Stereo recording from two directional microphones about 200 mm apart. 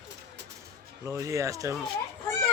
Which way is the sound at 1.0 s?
15° right (ahead or behind).